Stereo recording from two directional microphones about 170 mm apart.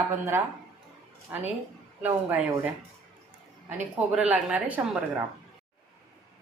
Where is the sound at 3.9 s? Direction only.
5° right (ahead or behind).